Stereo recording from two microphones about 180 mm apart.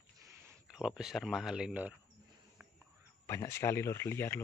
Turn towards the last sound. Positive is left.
turn(degrees=15)  # may be behind; listen again after turning